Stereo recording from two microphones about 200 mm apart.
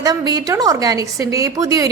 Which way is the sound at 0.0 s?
20° right (ahead or behind).